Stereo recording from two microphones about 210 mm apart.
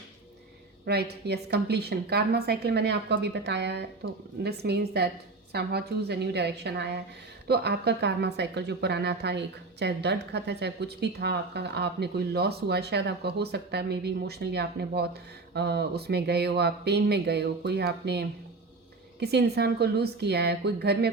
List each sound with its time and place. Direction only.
0.9 s speech: 50° right (ahead or behind)